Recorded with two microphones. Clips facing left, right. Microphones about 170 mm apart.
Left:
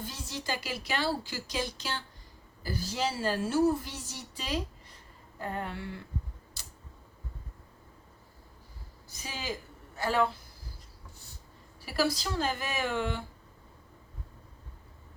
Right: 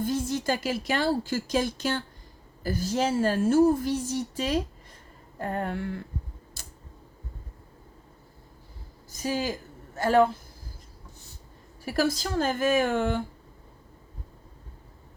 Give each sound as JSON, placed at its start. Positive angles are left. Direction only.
{"t": 0.0, "sound": "speech", "side_deg": -50}
{"t": 6.6, "sound": "tick", "side_deg": -50}
{"t": 9.0, "sound": "a woman's voice", "side_deg": -45}
{"t": 11.9, "sound": "speech", "side_deg": -45}